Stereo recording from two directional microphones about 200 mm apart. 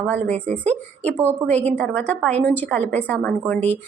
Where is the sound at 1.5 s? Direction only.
5° left (ahead or behind).